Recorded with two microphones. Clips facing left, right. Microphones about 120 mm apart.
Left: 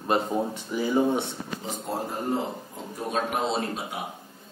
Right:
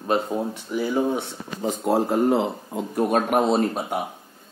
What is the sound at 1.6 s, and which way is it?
Speech, 70° right (ahead or behind).